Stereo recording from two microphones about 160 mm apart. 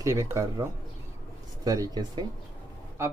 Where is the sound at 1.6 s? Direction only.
20° right (ahead or behind).